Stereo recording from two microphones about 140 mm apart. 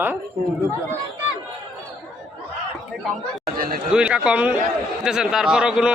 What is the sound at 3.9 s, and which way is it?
A man's voice, 5° right (ahead or behind).